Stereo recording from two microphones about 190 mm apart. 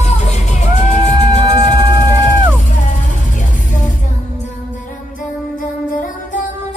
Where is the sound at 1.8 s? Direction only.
20° right (ahead or behind).